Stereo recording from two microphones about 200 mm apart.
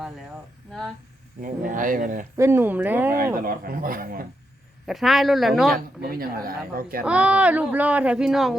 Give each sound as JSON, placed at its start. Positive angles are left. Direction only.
{"t": 1.4, "sound": "speech", "side_deg": -40}
{"t": 2.4, "sound": "speech", "side_deg": -10}
{"t": 3.3, "sound": "a woman's voice", "side_deg": -45}
{"t": 4.9, "sound": "speech", "side_deg": 0}
{"t": 5.7, "sound": "a woman's voice", "side_deg": -50}
{"t": 7.0, "sound": "speech", "side_deg": -5}